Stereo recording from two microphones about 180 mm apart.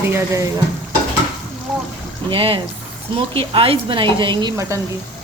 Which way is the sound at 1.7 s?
Centre (ahead or behind).